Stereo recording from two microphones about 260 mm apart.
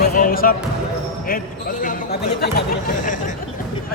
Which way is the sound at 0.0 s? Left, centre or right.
Left.